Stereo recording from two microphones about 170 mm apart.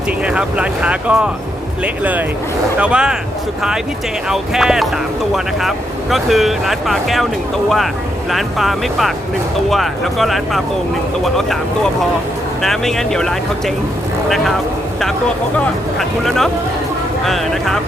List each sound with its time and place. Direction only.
0.3 s speech: 5° right (ahead or behind)
4.3 s speech: 5° right (ahead or behind)
8.3 s speech: centre (ahead or behind)
15.5 s speech: centre (ahead or behind)